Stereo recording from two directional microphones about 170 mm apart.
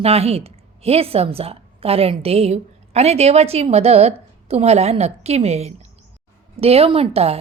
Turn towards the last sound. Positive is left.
turn(degrees=-35)  # may be behind; listen again after turning